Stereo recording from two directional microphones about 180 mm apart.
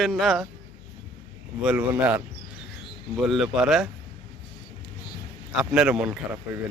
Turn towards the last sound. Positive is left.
turn(degrees=-5)  # may be behind; listen again after turning